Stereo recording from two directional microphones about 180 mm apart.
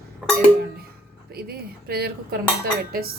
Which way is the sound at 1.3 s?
60° right (ahead or behind).